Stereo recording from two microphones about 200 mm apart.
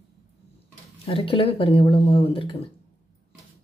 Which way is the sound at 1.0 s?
25° left (ahead or behind).